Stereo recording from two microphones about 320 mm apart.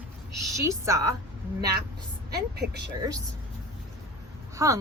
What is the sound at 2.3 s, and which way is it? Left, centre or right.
Speech, right.